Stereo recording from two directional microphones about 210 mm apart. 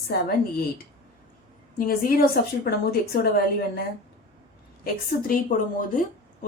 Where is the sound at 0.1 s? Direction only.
50° left (ahead or behind).